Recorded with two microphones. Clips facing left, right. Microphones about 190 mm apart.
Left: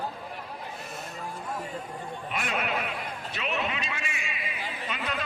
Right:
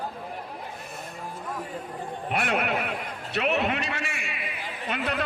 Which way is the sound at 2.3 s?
65° right (ahead or behind).